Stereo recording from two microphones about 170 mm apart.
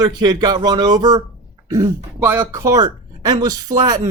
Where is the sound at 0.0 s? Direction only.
25° right (ahead or behind).